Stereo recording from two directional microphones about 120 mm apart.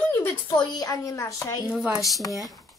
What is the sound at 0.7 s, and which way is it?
Speech, 30° left (ahead or behind).